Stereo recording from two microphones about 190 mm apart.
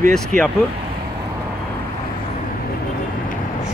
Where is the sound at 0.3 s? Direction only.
45° right (ahead or behind).